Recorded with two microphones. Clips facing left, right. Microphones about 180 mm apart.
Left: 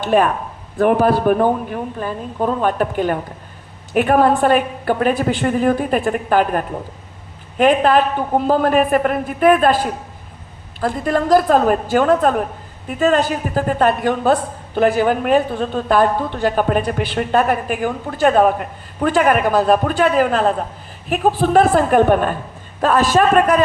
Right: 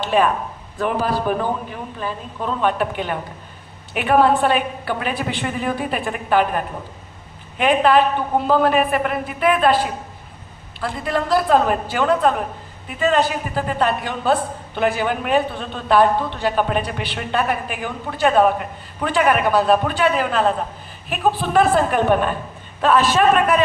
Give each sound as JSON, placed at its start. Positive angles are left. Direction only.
{"t": 0.0, "sound": "a man's voice", "side_deg": 50}